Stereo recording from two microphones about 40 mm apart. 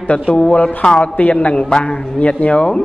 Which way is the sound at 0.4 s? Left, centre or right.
Left.